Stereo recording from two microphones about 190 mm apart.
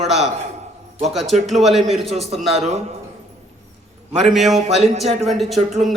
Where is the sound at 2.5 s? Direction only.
35° right (ahead or behind).